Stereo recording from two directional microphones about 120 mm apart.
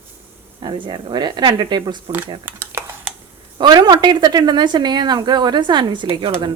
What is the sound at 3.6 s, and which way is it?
Speech, 35° right (ahead or behind).